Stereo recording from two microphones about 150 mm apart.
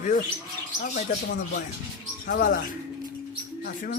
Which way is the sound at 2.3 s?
65° left (ahead or behind).